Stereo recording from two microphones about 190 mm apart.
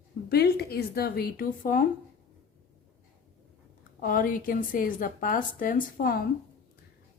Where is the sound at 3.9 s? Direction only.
50° left (ahead or behind).